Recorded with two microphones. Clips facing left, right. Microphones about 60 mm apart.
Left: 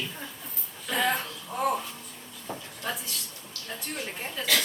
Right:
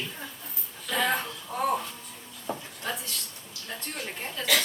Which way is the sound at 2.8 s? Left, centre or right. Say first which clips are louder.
Even; centre.